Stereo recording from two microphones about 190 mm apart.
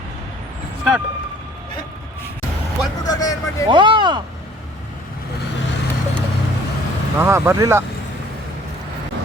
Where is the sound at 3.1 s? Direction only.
20° left (ahead or behind).